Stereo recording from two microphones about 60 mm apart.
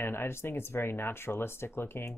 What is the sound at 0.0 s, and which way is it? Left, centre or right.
Speech, left.